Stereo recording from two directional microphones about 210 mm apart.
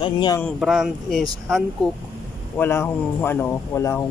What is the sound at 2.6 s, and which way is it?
Speech, 10° left (ahead or behind).